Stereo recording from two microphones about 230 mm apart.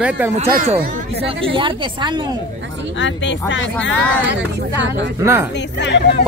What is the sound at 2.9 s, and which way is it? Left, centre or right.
Speech, left.